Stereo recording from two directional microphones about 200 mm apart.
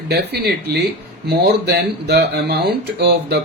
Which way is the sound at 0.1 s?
55° right (ahead or behind).